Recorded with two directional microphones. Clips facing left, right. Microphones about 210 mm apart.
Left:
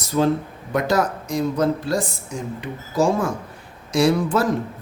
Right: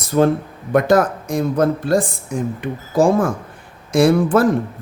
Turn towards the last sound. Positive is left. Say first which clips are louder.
# right 5 dB
turn(degrees=-55)  # may be behind; listen again after turning